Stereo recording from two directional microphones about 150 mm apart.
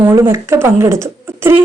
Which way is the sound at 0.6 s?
15° right (ahead or behind).